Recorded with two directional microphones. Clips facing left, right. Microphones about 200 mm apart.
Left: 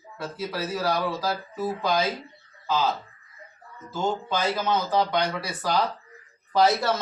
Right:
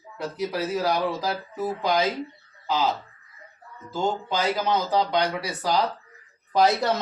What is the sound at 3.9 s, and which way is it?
Speech, 15° right (ahead or behind).